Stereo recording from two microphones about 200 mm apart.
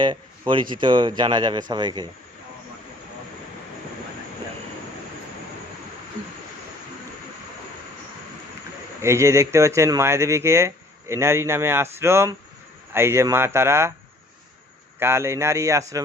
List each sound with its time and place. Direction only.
0.0 s speech: 25° right (ahead or behind)
9.0 s speech: 15° right (ahead or behind)
14.9 s speech: 10° right (ahead or behind)